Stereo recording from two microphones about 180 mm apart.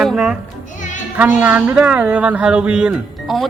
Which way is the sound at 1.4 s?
10° right (ahead or behind).